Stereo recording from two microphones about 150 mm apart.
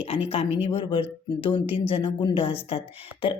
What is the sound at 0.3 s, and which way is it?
A woman's voice, 40° left (ahead or behind).